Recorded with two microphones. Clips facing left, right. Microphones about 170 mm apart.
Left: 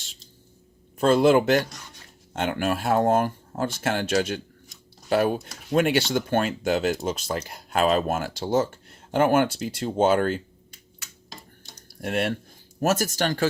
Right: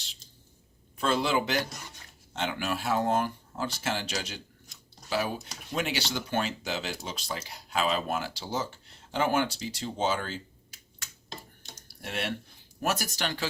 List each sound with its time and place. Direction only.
0.9 s speech: 45° left (ahead or behind)
11.9 s speech: 50° left (ahead or behind)